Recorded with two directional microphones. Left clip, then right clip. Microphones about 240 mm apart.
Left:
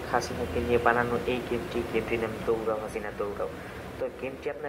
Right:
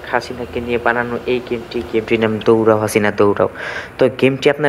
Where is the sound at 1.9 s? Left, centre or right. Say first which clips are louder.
Right 15 dB; right.